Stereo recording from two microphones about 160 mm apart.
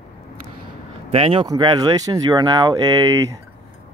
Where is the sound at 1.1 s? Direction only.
35° right (ahead or behind).